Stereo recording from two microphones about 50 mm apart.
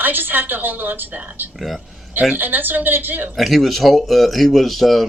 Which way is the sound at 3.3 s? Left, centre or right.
Centre.